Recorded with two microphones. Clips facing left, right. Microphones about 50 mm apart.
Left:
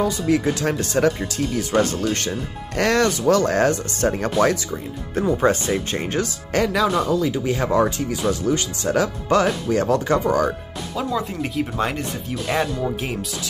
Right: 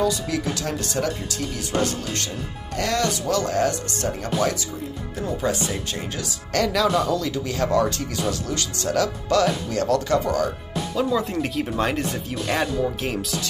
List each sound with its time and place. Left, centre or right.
0.0 s speech: left
6.5 s speech: centre
11.0 s speech: centre